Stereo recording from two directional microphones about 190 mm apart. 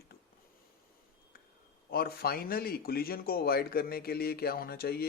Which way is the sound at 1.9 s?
55° left (ahead or behind).